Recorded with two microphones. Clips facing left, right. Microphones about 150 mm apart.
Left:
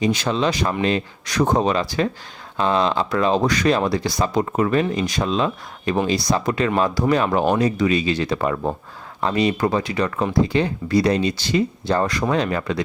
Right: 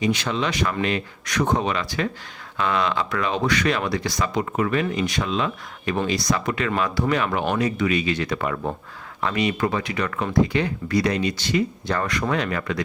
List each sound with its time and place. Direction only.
0.0 s speech: 35° left (ahead or behind)